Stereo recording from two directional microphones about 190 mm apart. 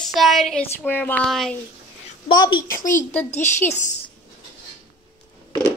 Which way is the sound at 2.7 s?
45° left (ahead or behind).